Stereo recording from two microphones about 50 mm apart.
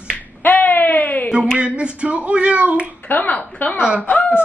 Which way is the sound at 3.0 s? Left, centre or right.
Left.